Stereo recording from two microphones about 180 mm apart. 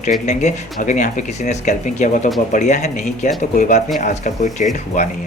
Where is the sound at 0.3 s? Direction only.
45° left (ahead or behind).